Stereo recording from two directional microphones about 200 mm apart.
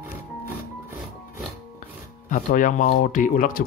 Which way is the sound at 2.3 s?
40° left (ahead or behind).